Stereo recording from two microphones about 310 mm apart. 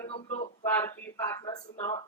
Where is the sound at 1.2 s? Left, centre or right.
Centre.